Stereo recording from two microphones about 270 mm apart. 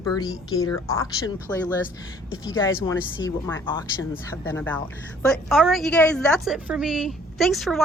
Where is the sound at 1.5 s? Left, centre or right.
Centre.